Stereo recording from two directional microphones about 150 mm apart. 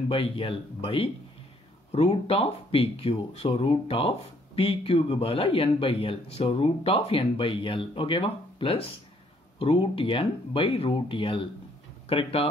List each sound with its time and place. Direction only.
0.1 s speech: 35° left (ahead or behind)